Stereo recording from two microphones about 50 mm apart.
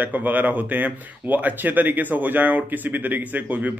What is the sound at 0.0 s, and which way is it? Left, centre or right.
Speech, right.